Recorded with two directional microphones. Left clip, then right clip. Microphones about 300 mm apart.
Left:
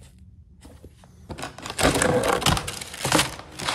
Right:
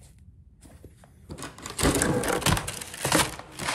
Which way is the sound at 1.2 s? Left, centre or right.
Centre.